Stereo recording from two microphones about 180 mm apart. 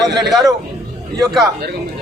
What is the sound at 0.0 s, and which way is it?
Speech, centre (ahead or behind).